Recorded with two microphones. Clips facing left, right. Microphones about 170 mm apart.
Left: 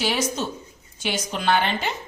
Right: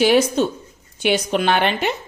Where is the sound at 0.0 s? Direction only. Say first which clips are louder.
Right 9 dB; 60° right (ahead or behind).